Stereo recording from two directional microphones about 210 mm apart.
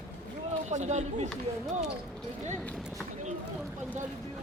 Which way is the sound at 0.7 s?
35° right (ahead or behind).